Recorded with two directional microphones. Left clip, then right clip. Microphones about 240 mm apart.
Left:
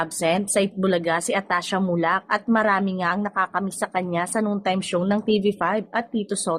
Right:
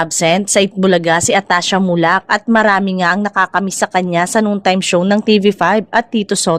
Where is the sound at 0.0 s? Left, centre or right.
Right.